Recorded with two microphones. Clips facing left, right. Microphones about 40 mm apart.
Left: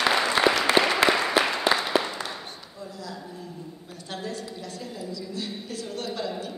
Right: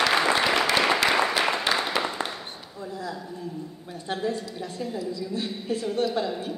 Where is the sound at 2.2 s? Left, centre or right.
Right.